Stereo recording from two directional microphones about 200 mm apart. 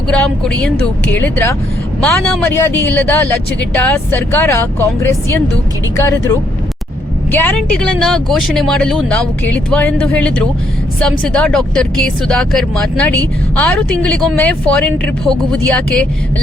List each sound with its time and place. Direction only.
0.1 s speech: 5° left (ahead or behind)